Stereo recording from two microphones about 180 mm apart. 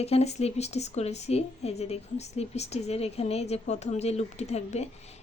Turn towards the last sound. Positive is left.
turn(degrees=35)  # may be behind; listen again after turning